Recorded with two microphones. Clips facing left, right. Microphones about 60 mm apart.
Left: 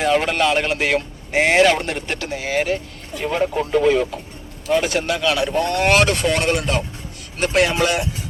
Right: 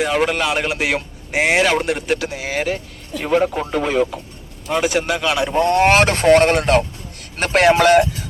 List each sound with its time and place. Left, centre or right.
0.0 s a man's voice: centre; by 8.0 s right